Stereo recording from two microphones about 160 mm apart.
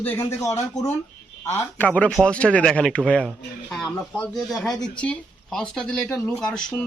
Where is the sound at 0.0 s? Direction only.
15° left (ahead or behind).